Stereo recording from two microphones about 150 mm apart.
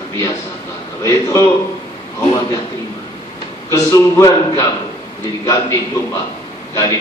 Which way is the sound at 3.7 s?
20° left (ahead or behind).